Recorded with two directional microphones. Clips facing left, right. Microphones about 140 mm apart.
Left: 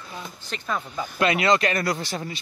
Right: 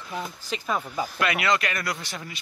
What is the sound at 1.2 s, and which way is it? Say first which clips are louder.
Speech: left 5 dB; 30° left (ahead or behind).